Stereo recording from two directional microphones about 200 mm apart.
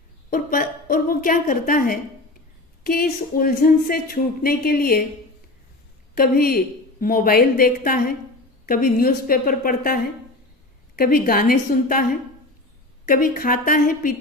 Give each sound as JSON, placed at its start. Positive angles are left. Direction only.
{"t": 0.3, "sound": "speech", "side_deg": 45}
{"t": 6.1, "sound": "speech", "side_deg": 50}
{"t": 13.1, "sound": "speech", "side_deg": 45}